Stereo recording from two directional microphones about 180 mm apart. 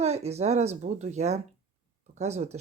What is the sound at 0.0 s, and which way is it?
Speech, 35° right (ahead or behind).